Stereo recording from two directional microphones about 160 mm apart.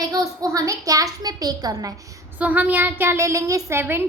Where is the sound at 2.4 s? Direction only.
10° right (ahead or behind).